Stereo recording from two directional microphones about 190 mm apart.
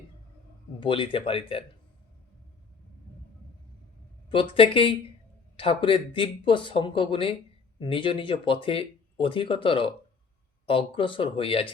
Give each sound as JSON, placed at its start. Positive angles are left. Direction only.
{"t": 0.8, "sound": "speech", "side_deg": 25}
{"t": 4.3, "sound": "speech", "side_deg": 30}